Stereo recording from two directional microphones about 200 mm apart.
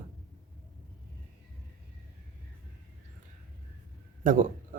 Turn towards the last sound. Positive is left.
turn(degrees=-40)  # may be behind; listen again after turning